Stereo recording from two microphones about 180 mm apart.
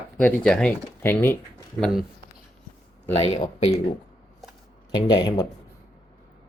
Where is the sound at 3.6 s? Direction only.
35° left (ahead or behind).